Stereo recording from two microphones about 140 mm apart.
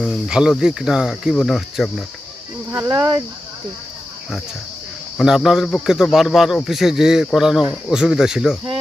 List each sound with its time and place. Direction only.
0.0 s speech: 5° right (ahead or behind)
2.7 s speech: 25° right (ahead or behind)
5.1 s speech: 5° right (ahead or behind)